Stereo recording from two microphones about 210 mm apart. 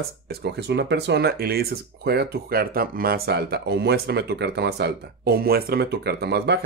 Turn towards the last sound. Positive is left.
turn(degrees=-50)  # may be behind; listen again after turning